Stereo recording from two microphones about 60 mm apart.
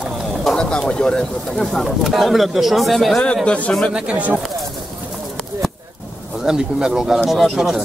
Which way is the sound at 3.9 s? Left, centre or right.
Centre.